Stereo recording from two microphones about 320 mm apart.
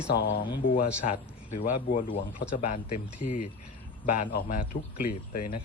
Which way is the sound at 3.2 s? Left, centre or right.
Left.